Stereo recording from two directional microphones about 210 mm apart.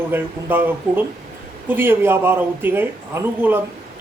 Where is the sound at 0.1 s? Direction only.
10° right (ahead or behind).